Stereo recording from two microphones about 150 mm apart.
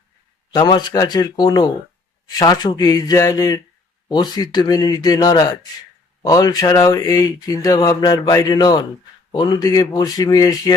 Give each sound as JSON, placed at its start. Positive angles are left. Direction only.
{"t": 0.5, "sound": "speech", "side_deg": 30}